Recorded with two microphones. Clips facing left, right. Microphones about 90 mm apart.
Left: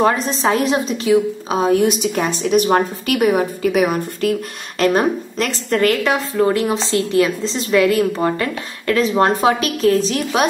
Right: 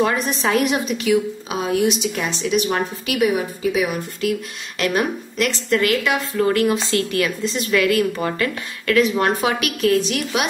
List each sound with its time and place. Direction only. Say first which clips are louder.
0.0 s a woman's voice: left 3 dB; 30° left (ahead or behind)